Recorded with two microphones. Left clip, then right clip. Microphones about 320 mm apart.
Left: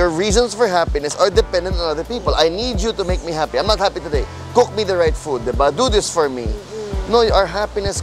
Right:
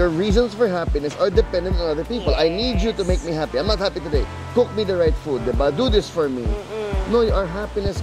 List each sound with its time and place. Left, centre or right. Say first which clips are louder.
0.0 s speech: left 3 dB; left
7.1 s speech: left 6 dB; left